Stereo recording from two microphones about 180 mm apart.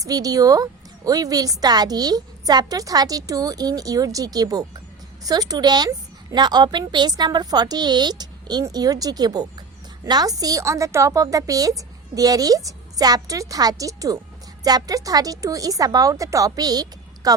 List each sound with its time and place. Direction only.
0.0 s a woman's voice: 20° right (ahead or behind)